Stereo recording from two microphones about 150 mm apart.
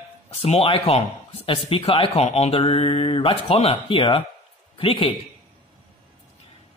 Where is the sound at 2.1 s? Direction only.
45° left (ahead or behind).